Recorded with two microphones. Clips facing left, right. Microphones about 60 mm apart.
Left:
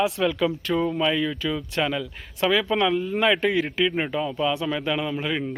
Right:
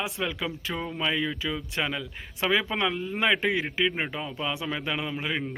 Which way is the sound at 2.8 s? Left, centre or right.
Centre.